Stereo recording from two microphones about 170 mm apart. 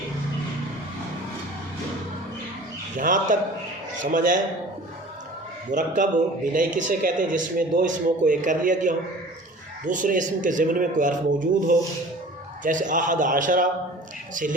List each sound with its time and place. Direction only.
3.0 s a man's voice: 50° right (ahead or behind)
5.7 s a man's voice: 45° right (ahead or behind)
12.6 s a man's voice: 50° right (ahead or behind)